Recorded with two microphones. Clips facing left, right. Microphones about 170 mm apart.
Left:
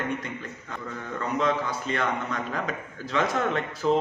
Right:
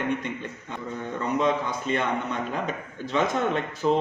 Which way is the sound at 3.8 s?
5° right (ahead or behind).